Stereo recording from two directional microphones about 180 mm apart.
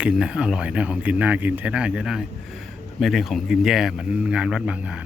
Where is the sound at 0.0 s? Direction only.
5° right (ahead or behind).